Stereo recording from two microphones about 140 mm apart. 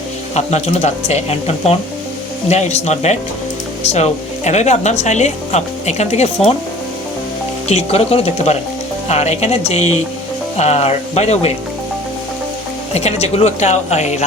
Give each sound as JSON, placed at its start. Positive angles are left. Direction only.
{"t": 0.3, "sound": "speech", "side_deg": 50}
{"t": 7.7, "sound": "speech", "side_deg": 45}
{"t": 12.9, "sound": "speech", "side_deg": 50}